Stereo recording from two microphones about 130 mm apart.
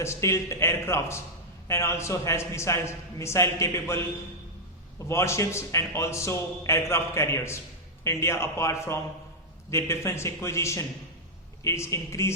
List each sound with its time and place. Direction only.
0.0 s a man's voice: 20° left (ahead or behind)
5.0 s a man's voice: 20° left (ahead or behind)